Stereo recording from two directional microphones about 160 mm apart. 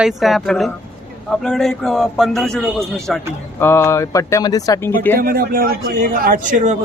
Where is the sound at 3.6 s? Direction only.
15° left (ahead or behind).